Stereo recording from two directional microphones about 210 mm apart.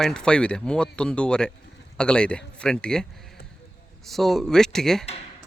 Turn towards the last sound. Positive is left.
turn(degrees=0)  # may be behind; listen again after turning